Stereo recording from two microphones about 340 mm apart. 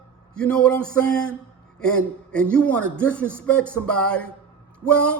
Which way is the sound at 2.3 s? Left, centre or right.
Centre.